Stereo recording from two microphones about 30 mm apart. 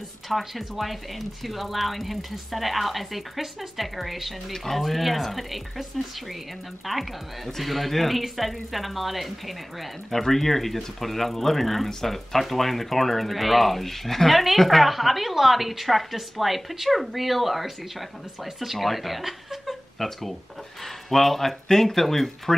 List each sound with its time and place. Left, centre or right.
0.3 s speech: centre
6.9 s speech: centre